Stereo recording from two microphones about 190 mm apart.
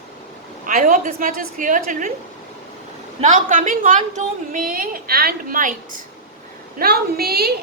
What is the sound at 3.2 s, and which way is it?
A woman's voice, 40° right (ahead or behind).